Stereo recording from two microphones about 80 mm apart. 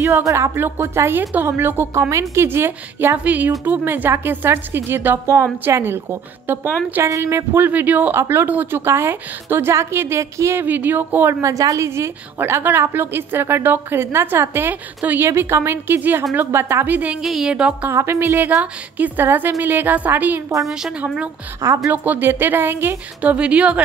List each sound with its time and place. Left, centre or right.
0.0 s a woman's voice: right
2.0 s a woman's voice: right
7.0 s a woman's voice: right
8.2 s a woman's voice: right
10.6 s a woman's voice: right
11.4 s a woman's voice: right; by 17.2 s centre
17.2 s a woman's voice: centre
17.8 s a woman's voice: right
21.5 s a woman's voice: right
21.9 s a woman's voice: right
23.3 s a woman's voice: centre